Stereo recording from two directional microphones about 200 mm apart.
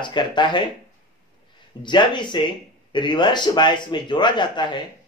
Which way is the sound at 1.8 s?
25° left (ahead or behind).